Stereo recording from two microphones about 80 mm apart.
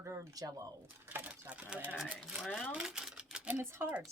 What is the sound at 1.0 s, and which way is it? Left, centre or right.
Sewing machine, right.